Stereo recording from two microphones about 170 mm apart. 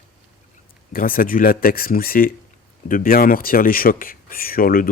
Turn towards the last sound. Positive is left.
turn(degrees=55)  # may be behind; listen again after turning